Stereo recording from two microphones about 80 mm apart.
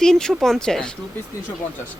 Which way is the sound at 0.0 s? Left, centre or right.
Centre.